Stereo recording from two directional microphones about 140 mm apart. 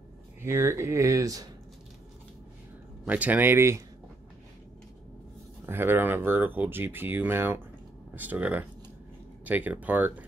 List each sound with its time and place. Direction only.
0.4 s speech: 20° right (ahead or behind)
3.1 s speech: 10° right (ahead or behind)
5.7 s speech: 15° right (ahead or behind)